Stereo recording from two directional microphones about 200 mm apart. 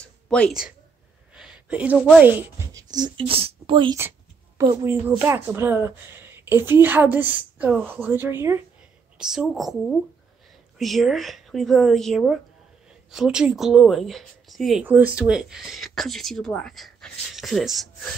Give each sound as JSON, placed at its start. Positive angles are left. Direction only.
{"t": 0.0, "sound": "speech", "side_deg": 5}
{"t": 1.3, "sound": "a sound", "side_deg": -5}
{"t": 2.2, "sound": "a woman's voice", "side_deg": -15}
{"t": 4.6, "sound": "a woman's voice", "side_deg": -15}